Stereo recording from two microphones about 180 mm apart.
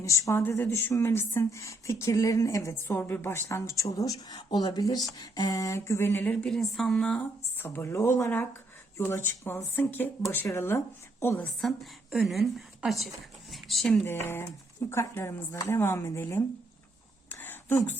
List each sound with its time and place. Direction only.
0.0 s speech: 15° left (ahead or behind)
11.6 s speech: centre (ahead or behind)
17.2 s a sound: 10° left (ahead or behind)